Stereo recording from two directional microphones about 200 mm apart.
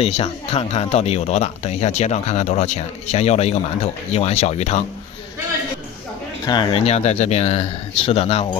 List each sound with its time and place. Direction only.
0.0 s speech: 30° left (ahead or behind)
6.4 s speech: 20° left (ahead or behind)